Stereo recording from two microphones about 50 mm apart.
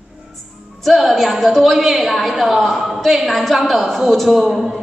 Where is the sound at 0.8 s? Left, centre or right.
Centre.